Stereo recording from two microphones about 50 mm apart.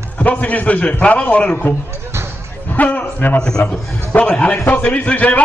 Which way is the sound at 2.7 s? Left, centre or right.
Left.